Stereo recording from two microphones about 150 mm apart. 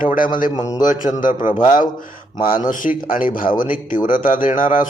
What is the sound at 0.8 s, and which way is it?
Speech, 60° left (ahead or behind).